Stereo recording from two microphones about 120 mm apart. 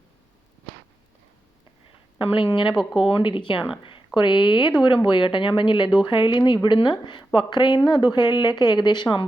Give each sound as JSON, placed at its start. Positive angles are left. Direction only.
{"t": 2.1, "sound": "speech", "side_deg": 45}
{"t": 2.7, "sound": "speech", "side_deg": -5}
{"t": 3.1, "sound": "speech", "side_deg": 45}